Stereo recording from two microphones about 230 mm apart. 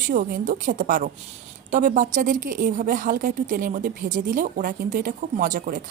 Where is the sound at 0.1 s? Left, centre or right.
Right.